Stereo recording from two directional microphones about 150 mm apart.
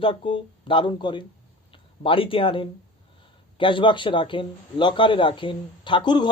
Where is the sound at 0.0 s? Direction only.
35° left (ahead or behind).